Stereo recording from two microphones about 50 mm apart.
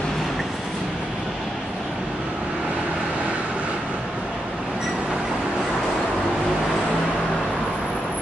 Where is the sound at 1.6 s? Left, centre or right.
Centre.